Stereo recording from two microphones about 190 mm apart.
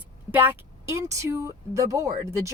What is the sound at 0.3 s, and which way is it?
Speech, 10° right (ahead or behind).